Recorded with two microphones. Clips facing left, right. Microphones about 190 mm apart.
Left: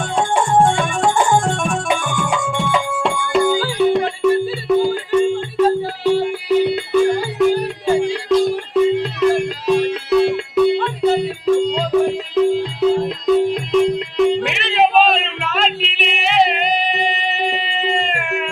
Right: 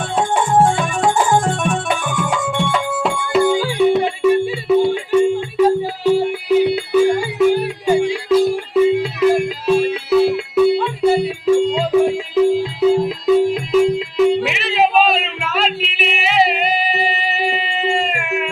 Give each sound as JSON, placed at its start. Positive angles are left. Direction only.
{"t": 0.2, "sound": "music", "side_deg": 0}